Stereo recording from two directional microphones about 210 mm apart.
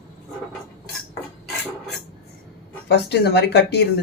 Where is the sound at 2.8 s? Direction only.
55° left (ahead or behind).